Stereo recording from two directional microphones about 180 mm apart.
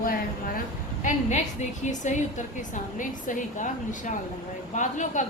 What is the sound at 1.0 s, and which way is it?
A woman's voice, 40° left (ahead or behind).